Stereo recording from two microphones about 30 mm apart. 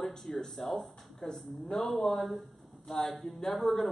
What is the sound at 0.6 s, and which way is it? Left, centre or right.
Speech, centre.